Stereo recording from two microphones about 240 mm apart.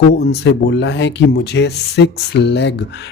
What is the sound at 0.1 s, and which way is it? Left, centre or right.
A man's voice, left.